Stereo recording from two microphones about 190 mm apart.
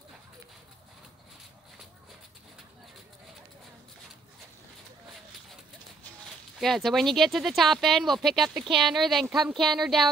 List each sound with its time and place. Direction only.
6.6 s speech: centre (ahead or behind)